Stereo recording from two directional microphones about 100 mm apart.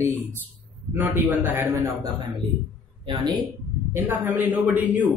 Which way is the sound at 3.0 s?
50° right (ahead or behind).